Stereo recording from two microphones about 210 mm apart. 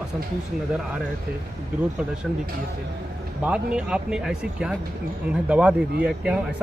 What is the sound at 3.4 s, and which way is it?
Speech, 5° right (ahead or behind).